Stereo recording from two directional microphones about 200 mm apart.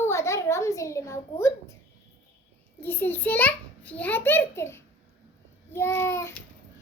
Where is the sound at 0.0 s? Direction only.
15° left (ahead or behind).